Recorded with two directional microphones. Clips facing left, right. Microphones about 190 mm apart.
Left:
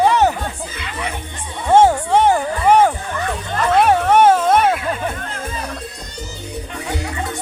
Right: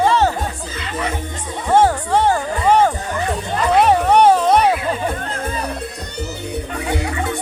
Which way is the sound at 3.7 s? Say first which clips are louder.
Even; centre (ahead or behind).